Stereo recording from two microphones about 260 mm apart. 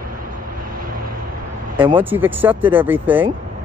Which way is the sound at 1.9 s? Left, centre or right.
Centre.